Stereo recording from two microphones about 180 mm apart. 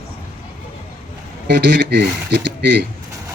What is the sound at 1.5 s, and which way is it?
Speech, 70° right (ahead or behind).